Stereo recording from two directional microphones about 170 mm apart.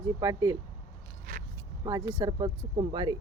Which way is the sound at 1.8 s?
20° right (ahead or behind).